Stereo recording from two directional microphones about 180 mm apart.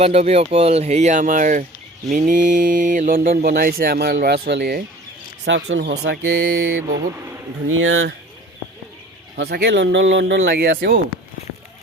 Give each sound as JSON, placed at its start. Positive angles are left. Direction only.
{"t": 0.0, "sound": "speech", "side_deg": -35}
{"t": 5.5, "sound": "speech", "side_deg": -90}
{"t": 9.3, "sound": "speech", "side_deg": -65}
{"t": 10.5, "sound": "speech", "side_deg": -55}